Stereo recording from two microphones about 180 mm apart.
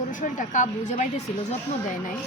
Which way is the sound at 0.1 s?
45° left (ahead or behind).